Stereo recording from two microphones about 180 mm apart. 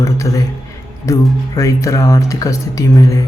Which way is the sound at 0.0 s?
15° left (ahead or behind).